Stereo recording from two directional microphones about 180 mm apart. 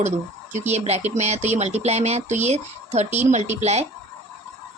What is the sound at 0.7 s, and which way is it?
A woman's voice, 35° right (ahead or behind).